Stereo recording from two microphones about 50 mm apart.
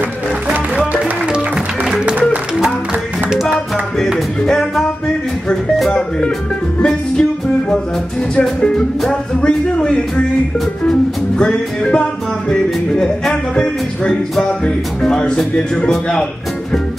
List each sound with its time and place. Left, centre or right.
1.9 s music: centre
3.3 s music: centre
4.5 s music: centre
6.8 s music: centre
8.4 s speech: centre
9.0 s music: centre
9.7 s speech: left
10.9 s music: centre
14.6 s music: centre